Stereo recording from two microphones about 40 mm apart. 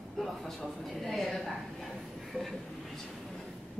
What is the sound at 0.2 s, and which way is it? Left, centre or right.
A woman's voice, centre.